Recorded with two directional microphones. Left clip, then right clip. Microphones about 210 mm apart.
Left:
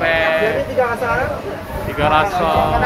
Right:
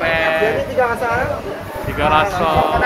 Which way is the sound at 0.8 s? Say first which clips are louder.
Right 1 dB; 25° right (ahead or behind).